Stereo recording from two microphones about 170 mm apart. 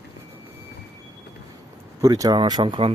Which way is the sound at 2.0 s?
20° right (ahead or behind).